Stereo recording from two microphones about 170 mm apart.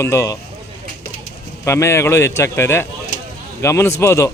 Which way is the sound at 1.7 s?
15° left (ahead or behind).